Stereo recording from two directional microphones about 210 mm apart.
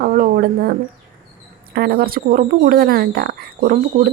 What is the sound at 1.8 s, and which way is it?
Speech, 45° right (ahead or behind).